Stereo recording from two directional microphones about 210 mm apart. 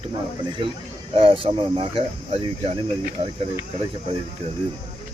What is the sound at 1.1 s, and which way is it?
Speech, 25° right (ahead or behind).